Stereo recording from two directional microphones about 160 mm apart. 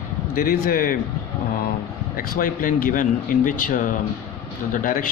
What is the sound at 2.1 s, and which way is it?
Speech, 65° left (ahead or behind).